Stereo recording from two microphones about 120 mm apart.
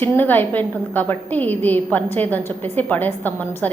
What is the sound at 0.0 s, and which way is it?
A woman's voice, 15° left (ahead or behind).